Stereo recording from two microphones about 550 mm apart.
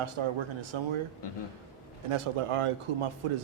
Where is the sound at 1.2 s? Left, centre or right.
Left.